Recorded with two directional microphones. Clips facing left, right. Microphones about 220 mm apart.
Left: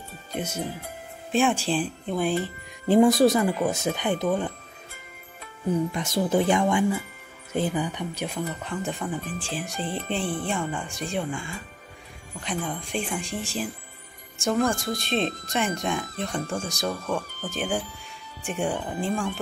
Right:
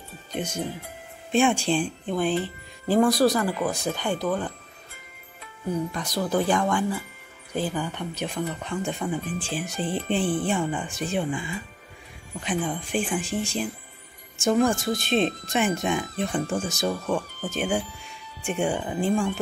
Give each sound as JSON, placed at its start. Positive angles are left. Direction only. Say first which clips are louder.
{"t": 0.3, "sound": "speech", "louder": "right 1 dB", "side_deg": 10}
{"t": 2.9, "sound": "speech", "louder": "left 2 dB", "side_deg": 25}
{"t": 5.9, "sound": "speech", "louder": "left 2 dB", "side_deg": 25}